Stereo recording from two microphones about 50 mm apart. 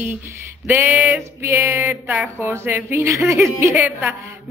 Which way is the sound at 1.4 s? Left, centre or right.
Right.